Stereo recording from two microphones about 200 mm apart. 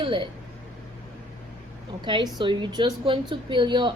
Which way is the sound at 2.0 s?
20° right (ahead or behind).